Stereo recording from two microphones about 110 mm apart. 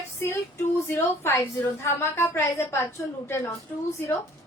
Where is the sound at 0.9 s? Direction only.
20° left (ahead or behind).